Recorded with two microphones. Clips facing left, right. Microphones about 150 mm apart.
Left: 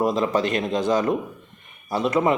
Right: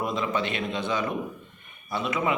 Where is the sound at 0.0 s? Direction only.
40° left (ahead or behind).